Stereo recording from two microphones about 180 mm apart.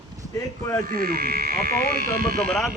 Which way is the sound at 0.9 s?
55° right (ahead or behind).